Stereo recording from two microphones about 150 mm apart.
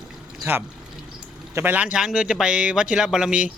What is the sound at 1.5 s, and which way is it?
Speech, 10° right (ahead or behind).